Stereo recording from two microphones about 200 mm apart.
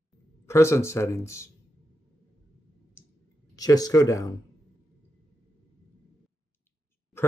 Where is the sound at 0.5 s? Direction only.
15° left (ahead or behind).